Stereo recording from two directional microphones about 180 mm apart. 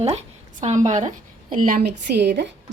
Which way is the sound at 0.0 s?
35° right (ahead or behind).